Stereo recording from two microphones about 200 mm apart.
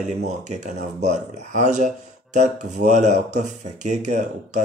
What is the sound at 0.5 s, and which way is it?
Speech, 35° right (ahead or behind).